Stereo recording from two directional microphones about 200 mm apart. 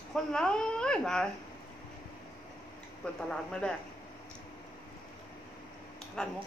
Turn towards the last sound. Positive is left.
turn(degrees=5)  # may be behind; listen again after turning